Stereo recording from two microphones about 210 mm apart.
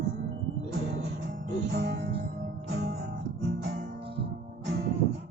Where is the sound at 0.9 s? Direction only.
50° right (ahead or behind).